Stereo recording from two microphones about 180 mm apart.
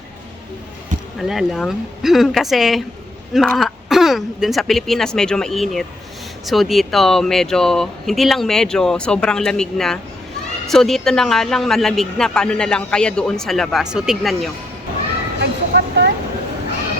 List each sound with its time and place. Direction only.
1.2 s speech: centre (ahead or behind)
15.4 s vehicle: 70° right (ahead or behind)